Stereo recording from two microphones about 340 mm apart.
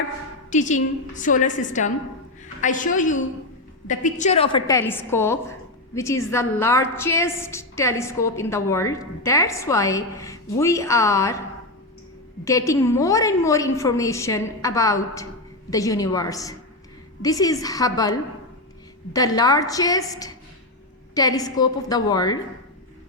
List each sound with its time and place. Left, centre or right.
0.5 s a woman's voice: left
12.5 s a woman's voice: centre